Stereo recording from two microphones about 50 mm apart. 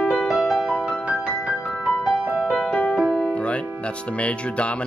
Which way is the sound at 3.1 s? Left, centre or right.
Left.